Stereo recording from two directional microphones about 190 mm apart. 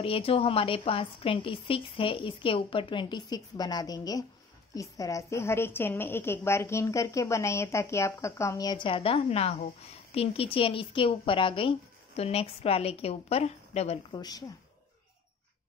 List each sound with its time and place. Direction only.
0.0 s a woman's voice: 30° left (ahead or behind)